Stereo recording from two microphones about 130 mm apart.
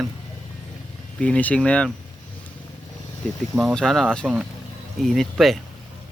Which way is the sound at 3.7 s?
5° left (ahead or behind).